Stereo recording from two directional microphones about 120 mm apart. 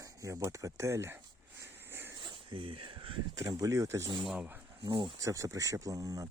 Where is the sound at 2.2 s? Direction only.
45° right (ahead or behind).